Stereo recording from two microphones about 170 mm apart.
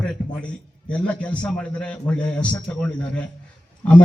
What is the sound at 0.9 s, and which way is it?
A man's voice, 5° left (ahead or behind).